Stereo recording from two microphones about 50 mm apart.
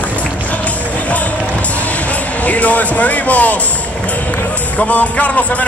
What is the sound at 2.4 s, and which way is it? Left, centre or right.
Music, left.